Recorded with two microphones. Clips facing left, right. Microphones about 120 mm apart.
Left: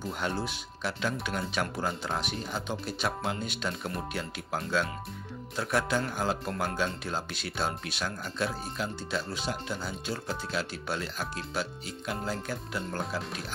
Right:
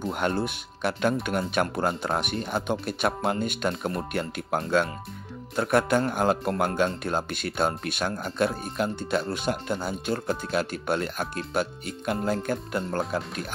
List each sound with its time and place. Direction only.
0.0 s speech: 60° right (ahead or behind)
5.6 s speech: 55° right (ahead or behind)